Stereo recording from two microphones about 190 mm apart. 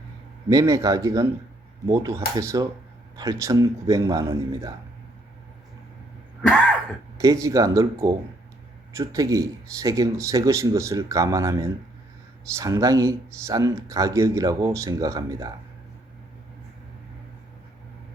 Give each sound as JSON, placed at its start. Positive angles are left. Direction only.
{"t": 0.4, "sound": "speech", "side_deg": -20}
{"t": 6.4, "sound": "cough", "side_deg": 5}
{"t": 7.2, "sound": "speech", "side_deg": -15}